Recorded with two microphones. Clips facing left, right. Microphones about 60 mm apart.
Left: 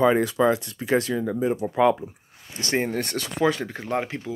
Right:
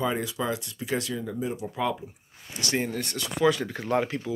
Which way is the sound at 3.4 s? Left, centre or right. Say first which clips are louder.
Even; left.